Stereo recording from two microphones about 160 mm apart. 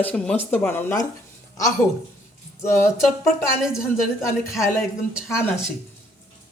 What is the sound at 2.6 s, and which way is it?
Speech, 15° left (ahead or behind).